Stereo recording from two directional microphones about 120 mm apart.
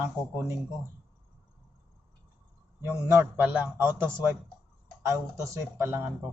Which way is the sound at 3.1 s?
20° right (ahead or behind).